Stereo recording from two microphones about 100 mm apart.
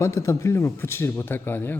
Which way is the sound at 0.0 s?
30° left (ahead or behind).